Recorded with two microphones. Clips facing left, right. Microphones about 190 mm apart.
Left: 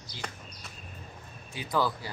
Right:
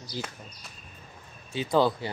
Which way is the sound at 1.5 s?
25° right (ahead or behind).